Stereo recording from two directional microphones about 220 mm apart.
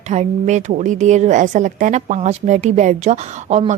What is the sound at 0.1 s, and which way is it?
A woman's voice, 30° right (ahead or behind).